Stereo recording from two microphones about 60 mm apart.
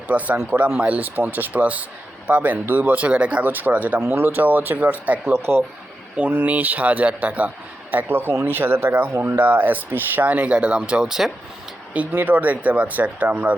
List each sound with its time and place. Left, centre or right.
0.1 s a man's voice: right
3.4 s a man's voice: right
5.3 s speech: right
6.1 s a man's voice: right
11.9 s a man's voice: right